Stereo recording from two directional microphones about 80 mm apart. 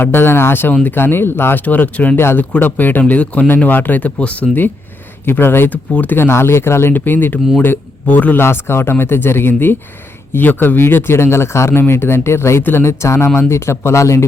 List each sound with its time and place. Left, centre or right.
0.0 s speech: left